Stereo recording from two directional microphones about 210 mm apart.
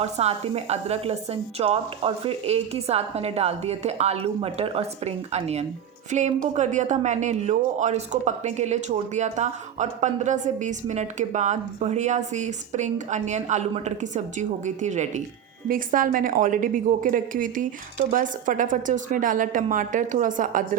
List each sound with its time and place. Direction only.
0.0 s a woman's voice: 30° right (ahead or behind)